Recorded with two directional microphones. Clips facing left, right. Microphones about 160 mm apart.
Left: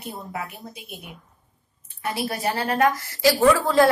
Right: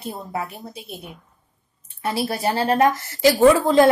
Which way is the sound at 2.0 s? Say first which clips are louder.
Right 3 dB; 30° right (ahead or behind).